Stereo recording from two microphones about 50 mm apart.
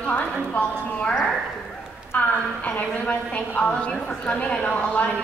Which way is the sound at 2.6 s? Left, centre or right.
Left.